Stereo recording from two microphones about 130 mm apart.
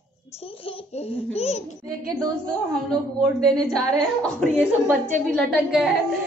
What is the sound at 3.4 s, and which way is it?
A woman's voice, 5° left (ahead or behind).